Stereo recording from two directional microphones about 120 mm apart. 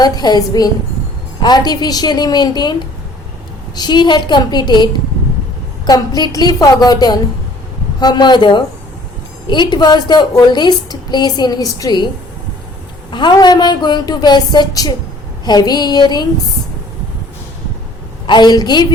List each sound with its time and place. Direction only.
0.0 s a woman's voice: 35° left (ahead or behind)
3.8 s a woman's voice: 35° left (ahead or behind)
13.1 s a woman's voice: 40° left (ahead or behind)
18.3 s a woman's voice: 35° left (ahead or behind)